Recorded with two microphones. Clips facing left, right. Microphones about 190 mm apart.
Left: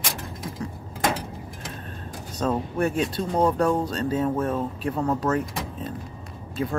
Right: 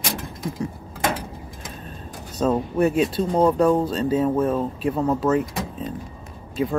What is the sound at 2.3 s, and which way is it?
Speech, 5° right (ahead or behind).